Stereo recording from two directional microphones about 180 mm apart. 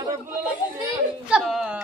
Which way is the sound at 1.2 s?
5° right (ahead or behind).